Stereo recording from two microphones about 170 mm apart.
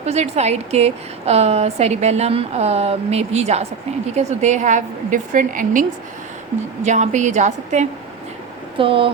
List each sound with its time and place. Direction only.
0.0 s a woman's voice: 40° right (ahead or behind)
6.8 s a woman's voice: 45° right (ahead or behind)
8.8 s a woman's voice: 30° right (ahead or behind)